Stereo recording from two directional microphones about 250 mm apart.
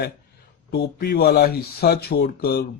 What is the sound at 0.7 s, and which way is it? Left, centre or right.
Speech, left.